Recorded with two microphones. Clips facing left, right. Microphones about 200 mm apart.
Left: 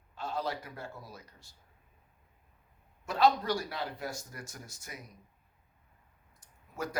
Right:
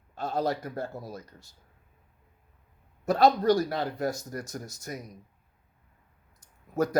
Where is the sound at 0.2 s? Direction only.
40° right (ahead or behind).